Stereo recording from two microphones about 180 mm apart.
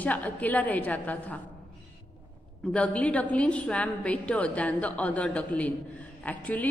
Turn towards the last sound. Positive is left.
turn(degrees=10)  # may be behind; listen again after turning